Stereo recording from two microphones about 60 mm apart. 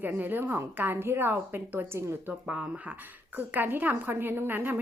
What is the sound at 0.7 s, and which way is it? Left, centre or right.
Speech, right.